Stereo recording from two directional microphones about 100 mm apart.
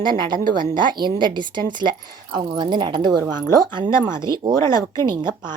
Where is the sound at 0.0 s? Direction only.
50° right (ahead or behind).